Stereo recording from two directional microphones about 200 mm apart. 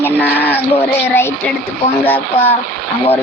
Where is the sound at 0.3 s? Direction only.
10° left (ahead or behind).